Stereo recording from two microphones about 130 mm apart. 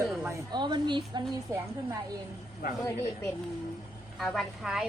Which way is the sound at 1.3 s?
25° right (ahead or behind).